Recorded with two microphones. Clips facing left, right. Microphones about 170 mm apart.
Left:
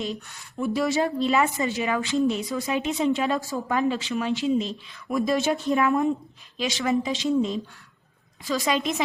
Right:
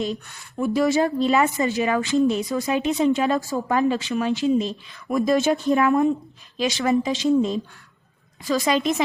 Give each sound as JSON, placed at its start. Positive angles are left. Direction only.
{"t": 0.6, "sound": "a woman's voice", "side_deg": -50}